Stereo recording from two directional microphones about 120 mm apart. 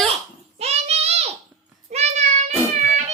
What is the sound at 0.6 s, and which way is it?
Child singing, 60° right (ahead or behind).